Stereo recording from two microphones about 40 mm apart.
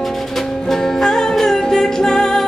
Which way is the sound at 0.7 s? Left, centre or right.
Centre.